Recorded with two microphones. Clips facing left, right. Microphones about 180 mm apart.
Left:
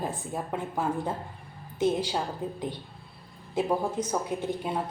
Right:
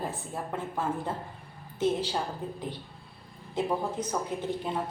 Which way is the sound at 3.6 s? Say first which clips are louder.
Left 2 dB; 10° left (ahead or behind).